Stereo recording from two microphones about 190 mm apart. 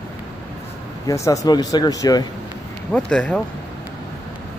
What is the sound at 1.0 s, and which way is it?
Speech, 15° left (ahead or behind).